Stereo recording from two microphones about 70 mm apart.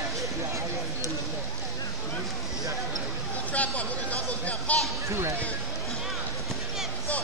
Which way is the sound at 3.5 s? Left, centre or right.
Centre.